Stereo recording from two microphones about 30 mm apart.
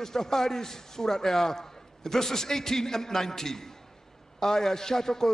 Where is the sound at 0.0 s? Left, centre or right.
Centre.